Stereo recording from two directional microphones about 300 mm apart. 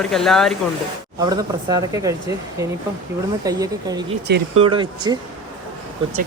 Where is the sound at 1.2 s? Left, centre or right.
Centre.